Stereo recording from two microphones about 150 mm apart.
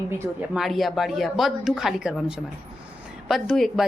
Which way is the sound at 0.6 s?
Centre (ahead or behind).